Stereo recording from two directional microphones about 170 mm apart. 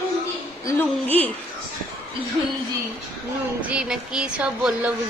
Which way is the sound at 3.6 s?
5° right (ahead or behind).